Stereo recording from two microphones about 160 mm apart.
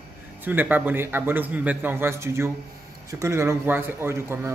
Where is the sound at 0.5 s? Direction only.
10° right (ahead or behind).